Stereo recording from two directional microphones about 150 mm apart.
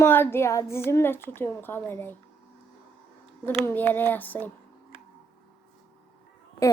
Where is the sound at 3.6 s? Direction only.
15° left (ahead or behind).